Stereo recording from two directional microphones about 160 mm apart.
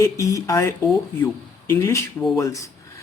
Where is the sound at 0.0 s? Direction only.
20° left (ahead or behind).